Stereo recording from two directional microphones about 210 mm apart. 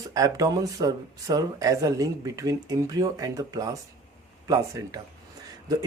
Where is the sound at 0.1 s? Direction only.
15° right (ahead or behind).